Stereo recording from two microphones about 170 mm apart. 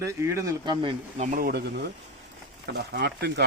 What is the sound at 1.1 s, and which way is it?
Speech, 50° right (ahead or behind).